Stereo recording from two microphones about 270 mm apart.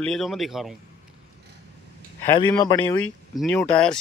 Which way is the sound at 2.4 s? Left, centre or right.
Centre.